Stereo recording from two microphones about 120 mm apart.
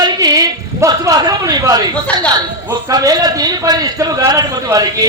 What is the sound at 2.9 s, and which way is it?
A man's voice, 30° right (ahead or behind).